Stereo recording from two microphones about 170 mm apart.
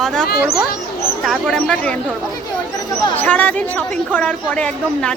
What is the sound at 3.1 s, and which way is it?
A woman's voice, 10° left (ahead or behind).